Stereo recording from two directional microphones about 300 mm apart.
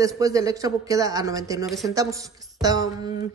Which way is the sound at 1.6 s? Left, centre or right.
Centre.